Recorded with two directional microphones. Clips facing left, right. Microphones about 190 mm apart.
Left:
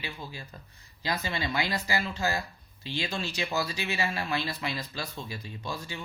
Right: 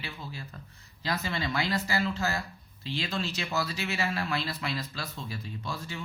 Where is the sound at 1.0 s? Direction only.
15° left (ahead or behind).